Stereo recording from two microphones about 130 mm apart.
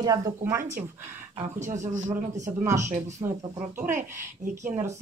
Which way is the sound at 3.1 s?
20° right (ahead or behind).